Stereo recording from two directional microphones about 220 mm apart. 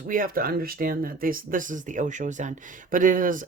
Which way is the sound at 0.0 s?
40° right (ahead or behind).